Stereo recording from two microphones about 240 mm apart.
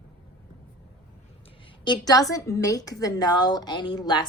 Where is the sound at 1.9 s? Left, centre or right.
Centre.